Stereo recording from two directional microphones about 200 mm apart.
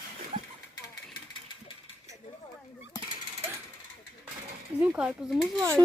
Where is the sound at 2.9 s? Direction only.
15° left (ahead or behind).